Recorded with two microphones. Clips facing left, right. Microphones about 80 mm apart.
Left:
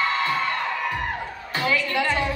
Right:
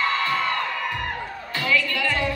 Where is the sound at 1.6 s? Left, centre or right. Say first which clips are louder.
Left 1 dB; left.